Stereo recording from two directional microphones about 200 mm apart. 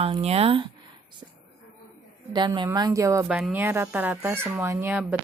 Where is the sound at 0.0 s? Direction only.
30° right (ahead or behind).